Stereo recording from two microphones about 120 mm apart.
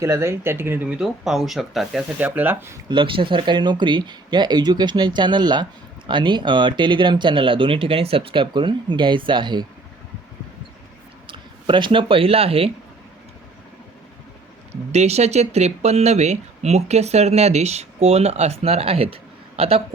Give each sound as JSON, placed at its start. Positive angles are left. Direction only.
{"t": 0.0, "sound": "speech", "side_deg": -20}
{"t": 2.1, "sound": "speech", "side_deg": -15}
{"t": 2.9, "sound": "speech", "side_deg": -45}
{"t": 11.3, "sound": "speech", "side_deg": -40}
{"t": 14.7, "sound": "speech", "side_deg": -65}